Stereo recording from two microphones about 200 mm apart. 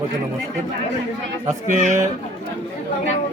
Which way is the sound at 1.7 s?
40° right (ahead or behind).